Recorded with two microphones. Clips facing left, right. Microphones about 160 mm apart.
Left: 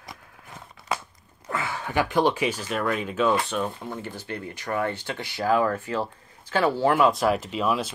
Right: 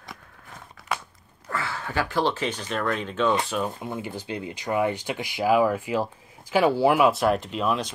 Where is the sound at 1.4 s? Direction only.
15° left (ahead or behind); by 3.6 s centre (ahead or behind).